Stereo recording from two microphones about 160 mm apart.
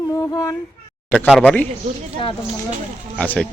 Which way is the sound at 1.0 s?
10° left (ahead or behind).